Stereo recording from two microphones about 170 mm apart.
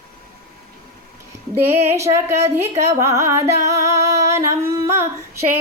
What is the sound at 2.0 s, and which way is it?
Carnatic music, 15° right (ahead or behind).